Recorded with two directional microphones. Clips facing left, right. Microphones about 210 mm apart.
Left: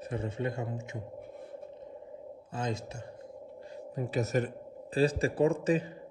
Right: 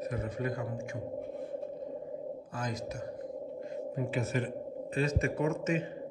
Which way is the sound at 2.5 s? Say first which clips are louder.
Left 4 dB; 25° left (ahead or behind).